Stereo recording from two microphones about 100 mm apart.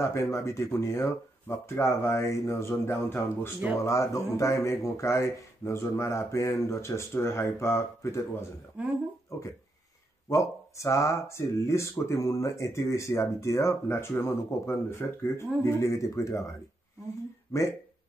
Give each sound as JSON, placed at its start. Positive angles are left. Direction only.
{"t": 0.0, "sound": "speech", "side_deg": 30}
{"t": 8.8, "sound": "speech", "side_deg": -15}
{"t": 9.3, "sound": "speech", "side_deg": 30}